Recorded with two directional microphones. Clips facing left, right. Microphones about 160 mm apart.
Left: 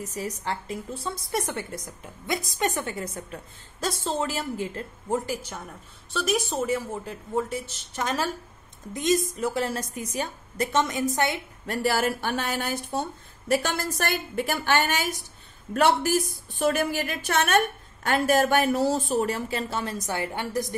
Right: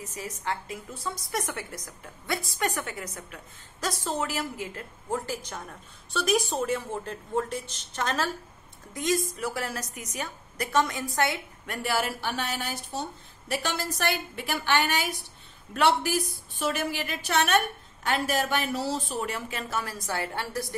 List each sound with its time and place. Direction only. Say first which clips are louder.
0.0 s a woman's voice: left 4 dB; 40° left (ahead or behind)
5.2 s a woman's voice: left 2 dB; 10° left (ahead or behind)
11.6 s a woman's voice: left 5 dB; 35° left (ahead or behind); by 20.7 s 20° left (ahead or behind)